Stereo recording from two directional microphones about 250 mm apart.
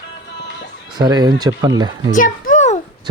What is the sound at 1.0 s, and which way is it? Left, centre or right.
Speech, centre.